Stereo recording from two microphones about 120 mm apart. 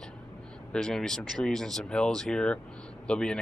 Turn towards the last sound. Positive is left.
turn(degrees=5)  # may be behind; listen again after turning